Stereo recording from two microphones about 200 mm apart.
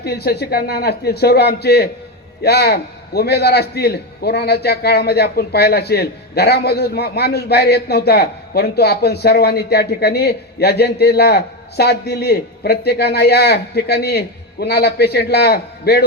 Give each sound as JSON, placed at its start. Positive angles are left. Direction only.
{"t": 0.0, "sound": "a man's voice", "side_deg": 50}